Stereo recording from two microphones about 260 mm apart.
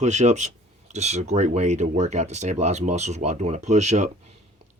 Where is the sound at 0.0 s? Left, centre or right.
Right.